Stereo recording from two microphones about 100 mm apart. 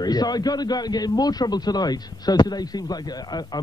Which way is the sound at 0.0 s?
40° left (ahead or behind).